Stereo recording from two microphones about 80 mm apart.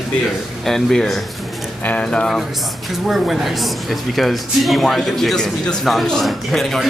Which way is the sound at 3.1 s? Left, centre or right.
Centre.